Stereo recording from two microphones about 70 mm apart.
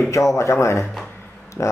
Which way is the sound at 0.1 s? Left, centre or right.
Left.